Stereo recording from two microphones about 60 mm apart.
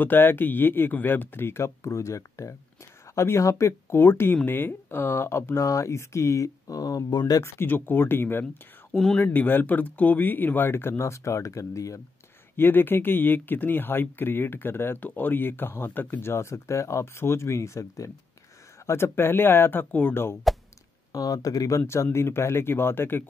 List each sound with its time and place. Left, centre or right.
0.0 s speech: left
7.5 s speech: left
8.9 s speech: centre
9.2 s speech: left
12.5 s speech: left
18.9 s speech: left
21.1 s speech: left